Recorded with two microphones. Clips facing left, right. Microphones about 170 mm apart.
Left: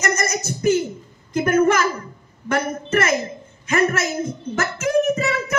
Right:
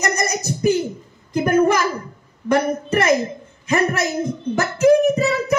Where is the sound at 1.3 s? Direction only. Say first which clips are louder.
Right 1 dB; 15° right (ahead or behind).